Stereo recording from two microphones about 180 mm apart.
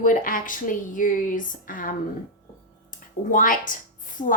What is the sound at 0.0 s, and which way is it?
A woman's voice, 50° left (ahead or behind).